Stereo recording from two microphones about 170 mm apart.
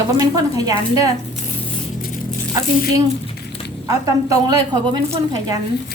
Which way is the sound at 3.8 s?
20° right (ahead or behind).